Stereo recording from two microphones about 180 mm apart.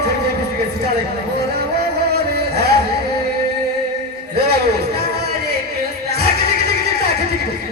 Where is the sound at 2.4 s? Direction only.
65° right (ahead or behind).